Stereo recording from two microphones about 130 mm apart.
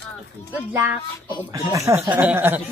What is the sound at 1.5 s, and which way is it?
Speech, 25° right (ahead or behind).